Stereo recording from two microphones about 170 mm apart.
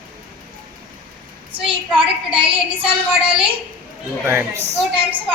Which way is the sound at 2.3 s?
30° right (ahead or behind).